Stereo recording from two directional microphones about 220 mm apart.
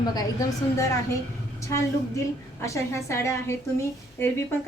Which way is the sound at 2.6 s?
15° left (ahead or behind).